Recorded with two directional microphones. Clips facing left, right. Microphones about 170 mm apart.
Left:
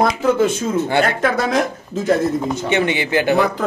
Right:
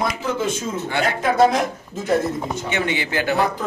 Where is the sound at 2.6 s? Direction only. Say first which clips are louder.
Left 5 dB; 20° left (ahead or behind).